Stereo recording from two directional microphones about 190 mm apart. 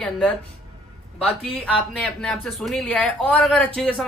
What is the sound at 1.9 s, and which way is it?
Speech, 5° left (ahead or behind).